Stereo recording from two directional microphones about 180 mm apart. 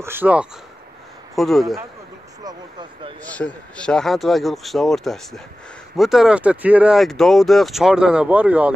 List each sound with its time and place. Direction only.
0.0 s speech: 10° right (ahead or behind)
2.4 s speech: 25° right (ahead or behind)
3.3 s speech: 5° left (ahead or behind); by 8.7 s 10° right (ahead or behind)